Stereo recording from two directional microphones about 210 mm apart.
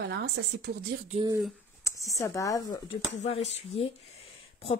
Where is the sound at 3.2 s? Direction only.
30° left (ahead or behind).